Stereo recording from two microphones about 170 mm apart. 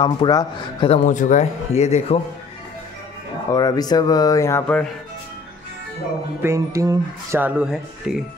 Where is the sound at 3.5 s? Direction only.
25° left (ahead or behind).